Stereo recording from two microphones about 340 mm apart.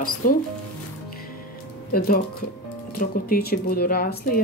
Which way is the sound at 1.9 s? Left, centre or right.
Left.